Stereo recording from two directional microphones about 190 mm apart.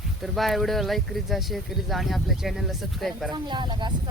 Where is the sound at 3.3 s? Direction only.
25° right (ahead or behind).